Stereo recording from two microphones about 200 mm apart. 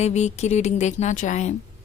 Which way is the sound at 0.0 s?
35° left (ahead or behind).